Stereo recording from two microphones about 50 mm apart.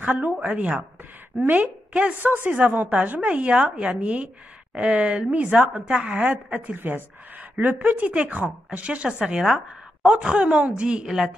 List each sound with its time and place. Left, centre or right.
0.0 s a woman's voice: right
2.1 s a woman's voice: right; by 5.3 s centre
5.3 s a woman's voice: right
9.2 s a woman's voice: centre
11.1 s speech: centre